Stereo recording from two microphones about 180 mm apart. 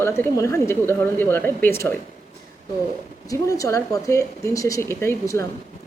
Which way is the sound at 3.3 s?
20° left (ahead or behind).